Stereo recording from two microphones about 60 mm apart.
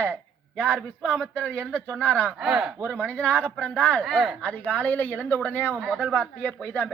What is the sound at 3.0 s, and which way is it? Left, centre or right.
Speech, centre.